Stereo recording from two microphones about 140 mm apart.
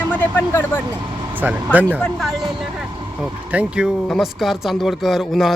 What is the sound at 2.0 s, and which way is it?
Speech, centre (ahead or behind).